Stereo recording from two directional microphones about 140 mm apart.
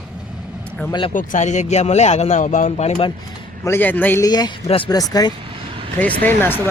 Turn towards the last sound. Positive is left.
turn(degrees=15)  # may be behind; listen again after turning